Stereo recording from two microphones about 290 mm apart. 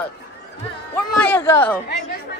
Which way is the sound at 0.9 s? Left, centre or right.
Centre.